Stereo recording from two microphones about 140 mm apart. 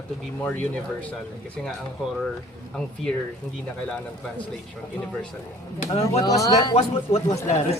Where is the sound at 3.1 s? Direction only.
5° left (ahead or behind).